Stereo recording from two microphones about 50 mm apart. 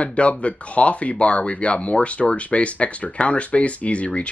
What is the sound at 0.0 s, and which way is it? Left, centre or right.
Speech, left.